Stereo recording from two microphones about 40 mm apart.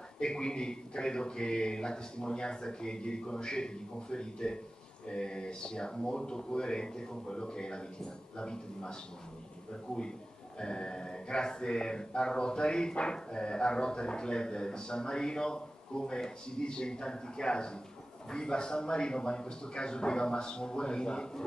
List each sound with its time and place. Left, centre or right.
0.2 s speech: left